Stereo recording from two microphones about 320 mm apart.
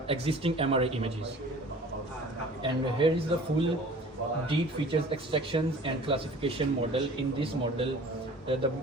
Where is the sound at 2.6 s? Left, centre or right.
Centre.